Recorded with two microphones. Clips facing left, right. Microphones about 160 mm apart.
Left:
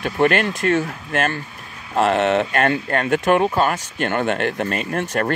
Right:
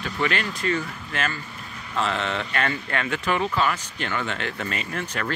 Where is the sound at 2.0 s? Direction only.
55° left (ahead or behind).